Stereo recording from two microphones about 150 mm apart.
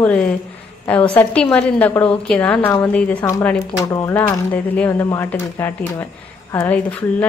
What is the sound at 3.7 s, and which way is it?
Speech, 20° left (ahead or behind).